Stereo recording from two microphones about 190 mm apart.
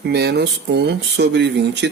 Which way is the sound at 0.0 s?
60° right (ahead or behind).